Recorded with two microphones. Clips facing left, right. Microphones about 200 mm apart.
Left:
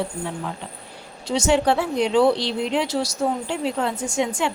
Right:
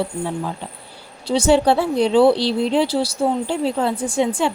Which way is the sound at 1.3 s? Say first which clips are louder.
Right 4 dB; 35° right (ahead or behind).